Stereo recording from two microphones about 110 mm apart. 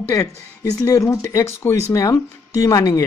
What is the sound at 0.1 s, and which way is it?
Speech, 30° left (ahead or behind).